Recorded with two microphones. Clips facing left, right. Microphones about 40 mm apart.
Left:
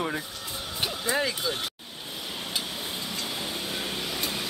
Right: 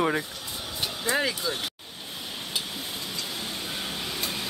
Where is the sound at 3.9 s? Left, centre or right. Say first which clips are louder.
Left 1 dB; centre.